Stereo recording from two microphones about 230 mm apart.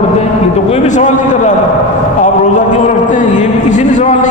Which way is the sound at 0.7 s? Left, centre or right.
Left.